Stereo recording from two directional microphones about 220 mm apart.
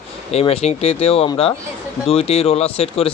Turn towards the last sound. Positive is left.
turn(degrees=25)  # may be behind; listen again after turning